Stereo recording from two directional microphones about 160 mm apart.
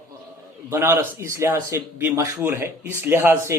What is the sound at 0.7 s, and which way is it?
Speech, 15° right (ahead or behind).